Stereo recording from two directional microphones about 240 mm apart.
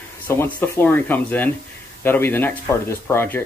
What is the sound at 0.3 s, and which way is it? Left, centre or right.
Speech, centre.